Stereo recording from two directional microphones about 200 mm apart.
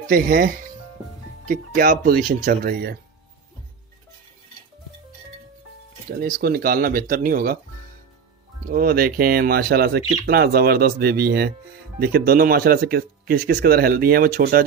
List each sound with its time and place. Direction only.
0.1 s speech: 45° right (ahead or behind)
6.0 s speech: 50° right (ahead or behind)
8.7 s speech: 45° right (ahead or behind)